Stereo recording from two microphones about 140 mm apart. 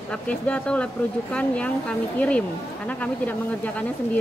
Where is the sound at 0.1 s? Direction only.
10° left (ahead or behind).